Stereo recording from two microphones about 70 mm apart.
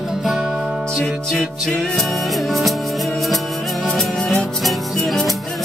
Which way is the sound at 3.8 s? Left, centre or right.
Centre.